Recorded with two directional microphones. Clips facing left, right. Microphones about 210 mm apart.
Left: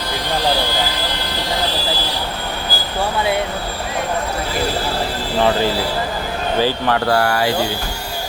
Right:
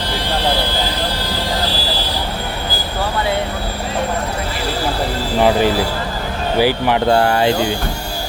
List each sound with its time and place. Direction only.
5.4 s speech: 15° right (ahead or behind)